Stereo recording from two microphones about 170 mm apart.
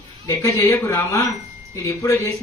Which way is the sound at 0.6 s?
15° left (ahead or behind).